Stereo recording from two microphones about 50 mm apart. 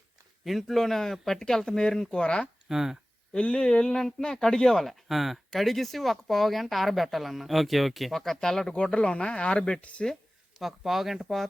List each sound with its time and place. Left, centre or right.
0.4 s speech: centre
2.6 s speech: centre
3.3 s speech: centre
10.6 s speech: centre